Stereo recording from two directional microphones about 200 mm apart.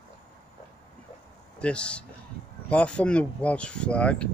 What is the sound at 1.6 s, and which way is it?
Speech, 5° left (ahead or behind).